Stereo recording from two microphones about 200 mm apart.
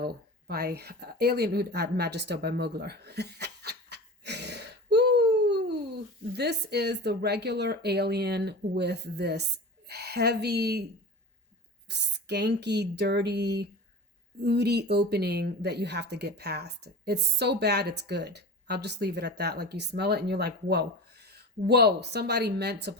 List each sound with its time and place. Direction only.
0.0 s a sound: 50° right (ahead or behind)
6.3 s speech: 55° right (ahead or behind)
11.9 s speech: 55° right (ahead or behind)